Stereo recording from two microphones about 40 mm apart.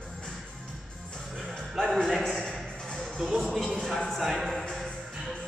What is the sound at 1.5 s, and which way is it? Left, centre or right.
Music, centre.